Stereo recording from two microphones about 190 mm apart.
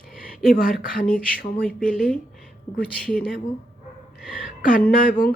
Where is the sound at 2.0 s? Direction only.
Centre (ahead or behind).